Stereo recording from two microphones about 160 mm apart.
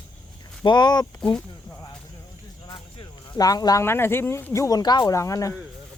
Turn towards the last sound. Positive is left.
turn(degrees=20)  # may be behind; listen again after turning